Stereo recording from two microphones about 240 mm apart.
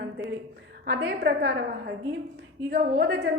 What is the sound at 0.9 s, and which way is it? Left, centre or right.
Speech, right.